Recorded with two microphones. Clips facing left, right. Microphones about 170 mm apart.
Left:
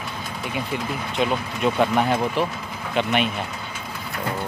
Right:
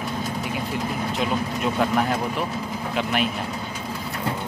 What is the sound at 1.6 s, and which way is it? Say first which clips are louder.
Speech: left 3 dB; centre (ahead or behind).